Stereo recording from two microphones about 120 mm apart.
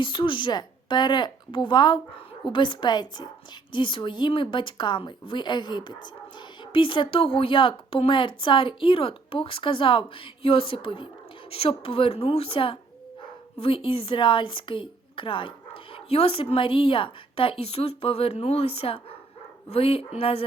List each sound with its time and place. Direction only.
0.0 s a woman's voice: 45° left (ahead or behind)